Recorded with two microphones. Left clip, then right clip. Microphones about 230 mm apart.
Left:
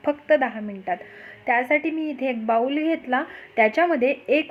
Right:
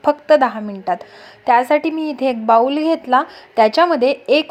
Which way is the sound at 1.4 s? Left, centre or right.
Centre.